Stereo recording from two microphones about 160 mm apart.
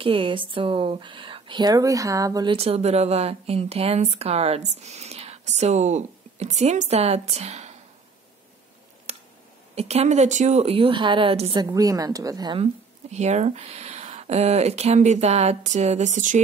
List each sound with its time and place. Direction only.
0.0 s a woman's voice: 35° right (ahead or behind)
2.5 s a woman's voice: 40° right (ahead or behind)
9.1 s a sound: 40° right (ahead or behind)
9.8 s a woman's voice: 40° right (ahead or behind); by 12.5 s 25° right (ahead or behind)
13.1 s a woman's voice: 45° right (ahead or behind)